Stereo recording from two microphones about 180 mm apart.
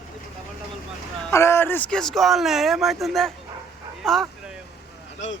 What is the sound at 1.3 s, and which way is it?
A man's voice, 15° left (ahead or behind).